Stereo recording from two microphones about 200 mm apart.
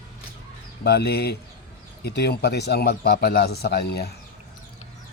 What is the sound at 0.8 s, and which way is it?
Chicken, 55° left (ahead or behind).